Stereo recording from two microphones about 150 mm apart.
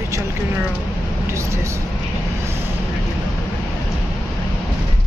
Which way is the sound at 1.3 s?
20° right (ahead or behind).